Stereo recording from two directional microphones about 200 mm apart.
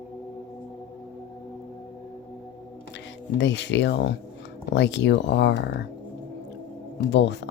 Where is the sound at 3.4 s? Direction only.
60° left (ahead or behind).